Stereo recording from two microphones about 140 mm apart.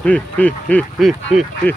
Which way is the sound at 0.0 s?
10° left (ahead or behind).